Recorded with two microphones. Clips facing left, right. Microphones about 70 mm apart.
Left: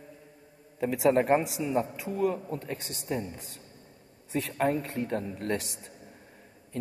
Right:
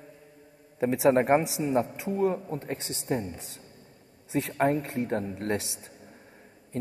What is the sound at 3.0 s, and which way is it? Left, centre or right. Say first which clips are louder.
Speech: right 3 dB; right.